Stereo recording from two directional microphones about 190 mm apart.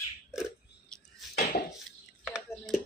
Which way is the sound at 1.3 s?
50° left (ahead or behind).